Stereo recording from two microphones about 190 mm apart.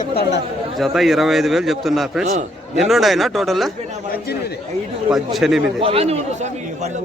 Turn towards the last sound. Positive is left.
turn(degrees=-30)  # may be behind; listen again after turning